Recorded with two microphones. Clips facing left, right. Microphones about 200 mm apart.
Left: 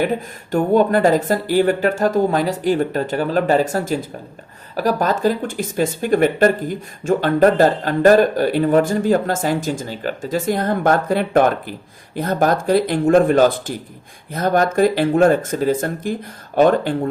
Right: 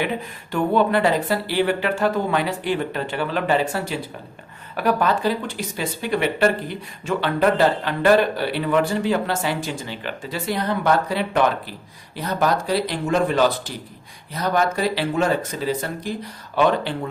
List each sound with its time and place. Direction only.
0.0 s speech: 45° left (ahead or behind)